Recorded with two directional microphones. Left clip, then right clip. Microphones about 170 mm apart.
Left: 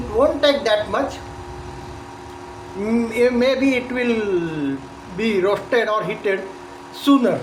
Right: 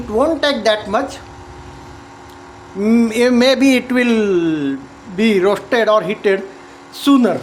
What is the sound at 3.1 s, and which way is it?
Speech, 75° right (ahead or behind).